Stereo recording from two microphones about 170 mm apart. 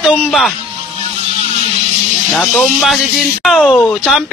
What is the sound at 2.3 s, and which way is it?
Speech, 5° left (ahead or behind).